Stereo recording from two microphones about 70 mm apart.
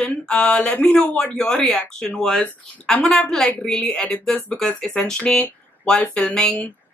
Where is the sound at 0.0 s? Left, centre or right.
Centre.